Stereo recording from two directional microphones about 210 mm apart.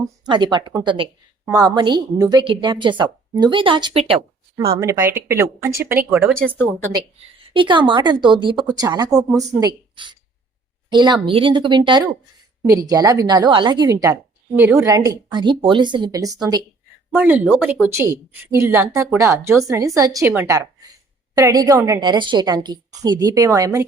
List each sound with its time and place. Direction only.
0.3 s a woman's voice: 20° right (ahead or behind)
4.8 s a woman's voice: 15° right (ahead or behind)
6.1 s speech: centre (ahead or behind)
7.4 s a woman's voice: 25° right (ahead or behind)
17.2 s a woman's voice: 10° right (ahead or behind)